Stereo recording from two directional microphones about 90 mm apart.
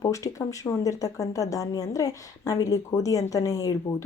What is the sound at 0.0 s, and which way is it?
A woman's voice, 35° left (ahead or behind).